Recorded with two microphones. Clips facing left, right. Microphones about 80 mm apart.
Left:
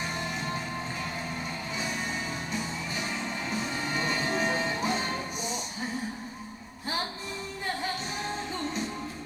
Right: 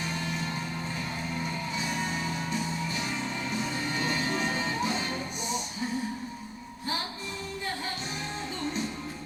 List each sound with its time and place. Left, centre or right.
3.9 s music: left